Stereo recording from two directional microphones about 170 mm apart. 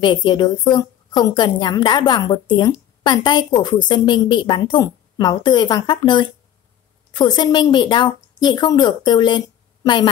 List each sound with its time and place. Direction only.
0.0 s a woman's voice: 25° left (ahead or behind)